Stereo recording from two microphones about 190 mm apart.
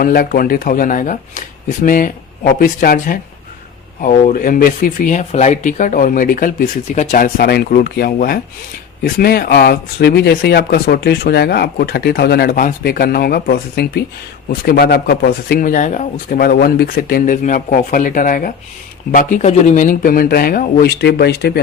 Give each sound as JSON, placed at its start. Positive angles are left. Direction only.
{"t": 0.0, "sound": "speech", "side_deg": 50}